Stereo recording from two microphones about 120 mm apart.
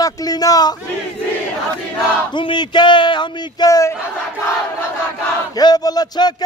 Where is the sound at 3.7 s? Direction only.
25° left (ahead or behind).